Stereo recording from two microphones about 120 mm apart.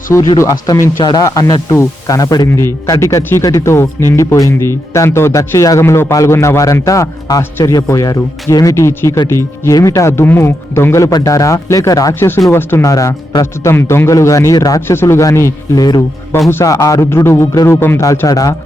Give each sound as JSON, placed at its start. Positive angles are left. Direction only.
{"t": 0.3, "sound": "speech", "side_deg": 30}
{"t": 2.5, "sound": "speech", "side_deg": 20}
{"t": 14.8, "sound": "speech", "side_deg": 20}
{"t": 17.7, "sound": "a man's voice", "side_deg": 15}